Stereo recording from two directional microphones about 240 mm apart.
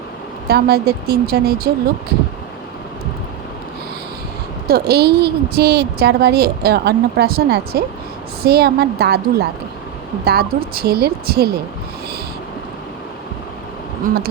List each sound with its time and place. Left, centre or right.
0.4 s a woman's voice: right
4.7 s a woman's voice: right